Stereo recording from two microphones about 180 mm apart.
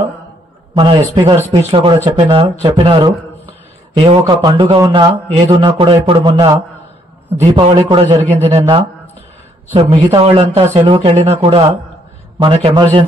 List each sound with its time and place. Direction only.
0.7 s a man's voice: 30° right (ahead or behind)